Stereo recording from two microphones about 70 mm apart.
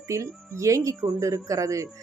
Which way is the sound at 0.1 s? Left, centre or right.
Right.